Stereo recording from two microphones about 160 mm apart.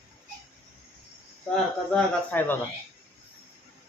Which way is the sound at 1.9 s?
10° left (ahead or behind).